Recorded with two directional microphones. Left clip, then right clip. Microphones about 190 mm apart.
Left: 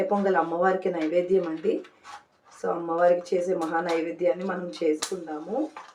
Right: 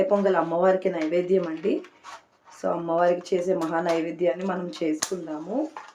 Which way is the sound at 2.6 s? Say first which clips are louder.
Even; 45° right (ahead or behind).